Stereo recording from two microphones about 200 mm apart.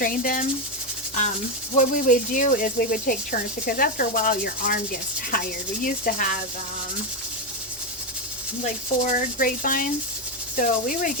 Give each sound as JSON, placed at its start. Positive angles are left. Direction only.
{"t": 0.0, "sound": "speech", "side_deg": 45}
{"t": 1.7, "sound": "speech", "side_deg": 40}
{"t": 8.6, "sound": "speech", "side_deg": 40}